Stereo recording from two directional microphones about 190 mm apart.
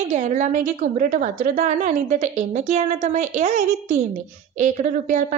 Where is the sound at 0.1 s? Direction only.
40° right (ahead or behind).